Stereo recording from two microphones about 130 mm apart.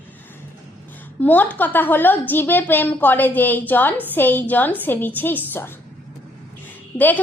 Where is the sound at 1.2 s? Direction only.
15° left (ahead or behind).